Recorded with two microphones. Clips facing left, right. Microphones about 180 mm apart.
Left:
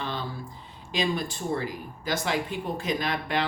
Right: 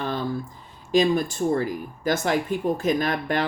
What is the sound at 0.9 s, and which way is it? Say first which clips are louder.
Speech: right 8 dB; 45° right (ahead or behind).